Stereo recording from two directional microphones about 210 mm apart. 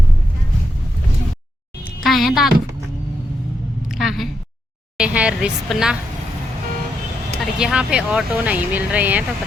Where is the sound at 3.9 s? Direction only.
Centre (ahead or behind).